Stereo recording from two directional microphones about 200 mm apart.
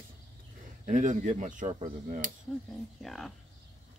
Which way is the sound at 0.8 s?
40° right (ahead or behind).